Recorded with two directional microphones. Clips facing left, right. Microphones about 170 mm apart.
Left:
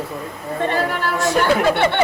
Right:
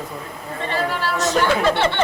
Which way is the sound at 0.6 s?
50° left (ahead or behind).